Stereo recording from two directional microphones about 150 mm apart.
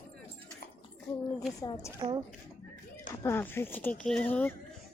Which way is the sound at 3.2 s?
15° left (ahead or behind).